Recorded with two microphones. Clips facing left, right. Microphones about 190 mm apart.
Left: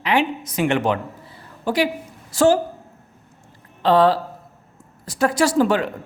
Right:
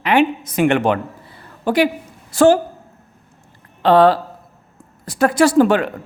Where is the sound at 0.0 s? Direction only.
55° right (ahead or behind).